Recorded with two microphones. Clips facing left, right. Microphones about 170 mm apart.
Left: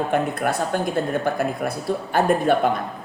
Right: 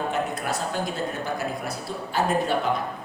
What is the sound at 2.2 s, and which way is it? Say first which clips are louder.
Speech: left 5 dB; 55° left (ahead or behind).